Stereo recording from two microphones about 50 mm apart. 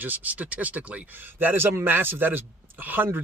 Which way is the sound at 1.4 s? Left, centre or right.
Right.